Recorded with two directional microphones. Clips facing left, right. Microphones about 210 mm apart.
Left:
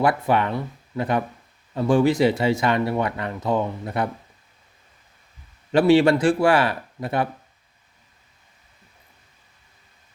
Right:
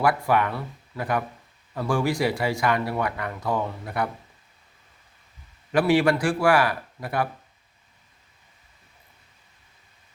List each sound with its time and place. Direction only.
0.0 s speech: 25° left (ahead or behind)
5.7 s speech: 25° left (ahead or behind)